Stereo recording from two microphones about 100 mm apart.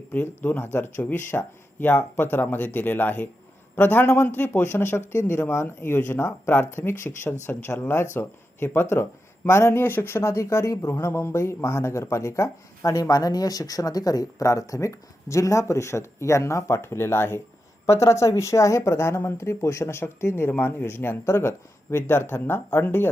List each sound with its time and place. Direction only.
0.1 s a man's voice: 20° left (ahead or behind)